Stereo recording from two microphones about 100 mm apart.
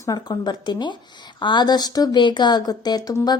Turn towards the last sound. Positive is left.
turn(degrees=45)  # may be behind; listen again after turning